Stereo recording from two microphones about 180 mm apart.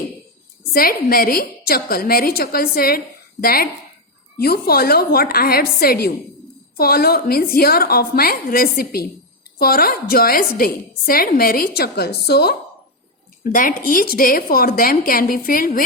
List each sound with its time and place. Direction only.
0.7 s a woman's voice: 55° left (ahead or behind)
13.4 s a woman's voice: 50° left (ahead or behind)